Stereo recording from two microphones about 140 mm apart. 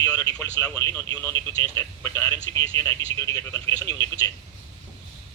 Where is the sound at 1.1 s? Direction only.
25° left (ahead or behind).